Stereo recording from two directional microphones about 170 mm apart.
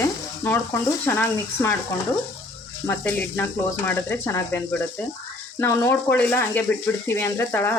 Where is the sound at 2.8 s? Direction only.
15° left (ahead or behind).